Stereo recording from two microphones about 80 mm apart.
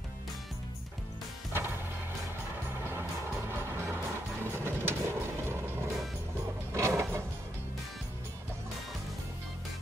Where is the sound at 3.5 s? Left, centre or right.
Right.